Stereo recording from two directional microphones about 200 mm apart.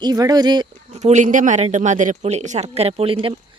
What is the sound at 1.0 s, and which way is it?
Speech, 35° right (ahead or behind).